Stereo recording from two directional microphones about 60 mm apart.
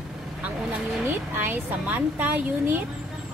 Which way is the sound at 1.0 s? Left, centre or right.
Right.